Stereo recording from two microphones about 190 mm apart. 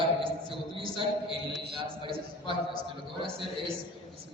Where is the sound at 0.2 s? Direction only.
30° right (ahead or behind).